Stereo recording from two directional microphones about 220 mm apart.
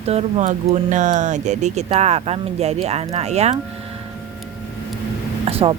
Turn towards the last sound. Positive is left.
turn(degrees=-25)  # may be behind; listen again after turning